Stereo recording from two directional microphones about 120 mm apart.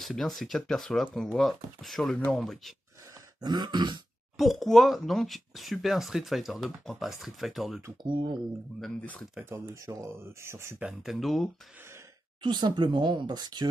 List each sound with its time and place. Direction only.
0.0 s speech: centre (ahead or behind)
3.3 s speech: 35° right (ahead or behind)
4.4 s speech: centre (ahead or behind)
8.0 s speech: 40° right (ahead or behind)
8.8 s speech: 10° left (ahead or behind)
9.4 s speech: 25° right (ahead or behind)
10.8 s speech: 5° right (ahead or behind)
12.4 s speech: 40° right (ahead or behind)